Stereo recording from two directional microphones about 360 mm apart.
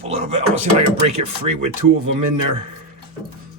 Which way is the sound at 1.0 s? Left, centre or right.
Right.